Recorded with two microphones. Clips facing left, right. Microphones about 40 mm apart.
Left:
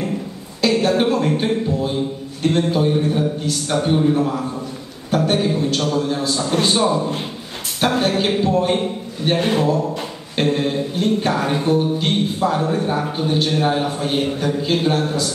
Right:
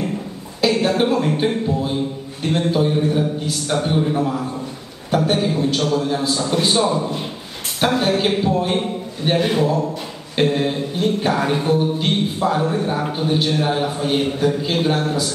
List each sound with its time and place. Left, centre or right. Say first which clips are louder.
0.6 s speech: even; centre
1.7 s mantra: even; centre
8.0 s mantra: even; centre
9.2 s a man's voice: even; centre
10.3 s mantra: right 1 dB; centre